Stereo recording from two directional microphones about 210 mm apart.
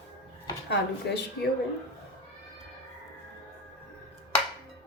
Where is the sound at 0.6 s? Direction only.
55° left (ahead or behind).